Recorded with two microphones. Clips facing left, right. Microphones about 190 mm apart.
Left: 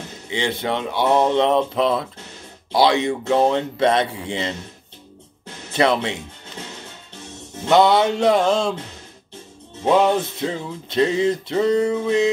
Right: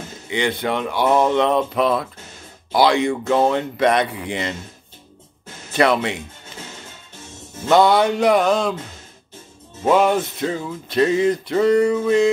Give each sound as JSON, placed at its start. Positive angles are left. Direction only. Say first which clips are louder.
{"t": 0.3, "sound": "music", "louder": "right 2 dB", "side_deg": 25}
{"t": 5.7, "sound": "speech", "louder": "right 1 dB", "side_deg": 25}
{"t": 7.6, "sound": "music", "louder": "even", "side_deg": 20}
{"t": 9.8, "sound": "music", "louder": "even", "side_deg": 25}